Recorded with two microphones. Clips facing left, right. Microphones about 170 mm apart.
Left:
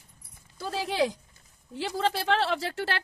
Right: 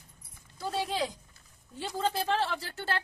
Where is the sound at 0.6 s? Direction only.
80° left.